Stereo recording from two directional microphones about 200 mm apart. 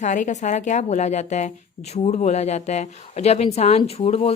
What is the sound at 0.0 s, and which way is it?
A woman's voice, 40° left (ahead or behind).